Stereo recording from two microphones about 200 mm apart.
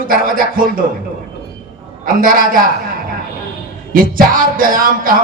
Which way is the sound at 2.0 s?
45° right (ahead or behind).